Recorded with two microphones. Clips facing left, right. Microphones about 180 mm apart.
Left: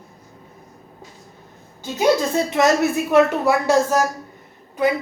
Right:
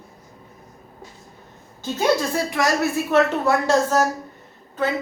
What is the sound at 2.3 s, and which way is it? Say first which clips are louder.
A woman's voice: left 4 dB; 20° left (ahead or behind).